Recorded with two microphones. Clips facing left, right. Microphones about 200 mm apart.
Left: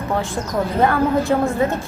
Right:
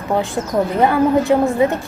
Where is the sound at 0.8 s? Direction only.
15° right (ahead or behind).